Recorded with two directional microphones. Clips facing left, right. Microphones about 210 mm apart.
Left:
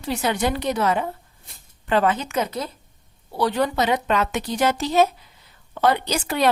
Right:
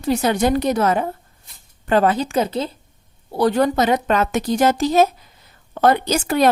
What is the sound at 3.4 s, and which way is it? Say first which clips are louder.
A woman's voice: right 5 dB; 45° right (ahead or behind).